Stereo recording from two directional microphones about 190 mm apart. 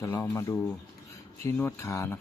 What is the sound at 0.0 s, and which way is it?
Speech, 15° left (ahead or behind).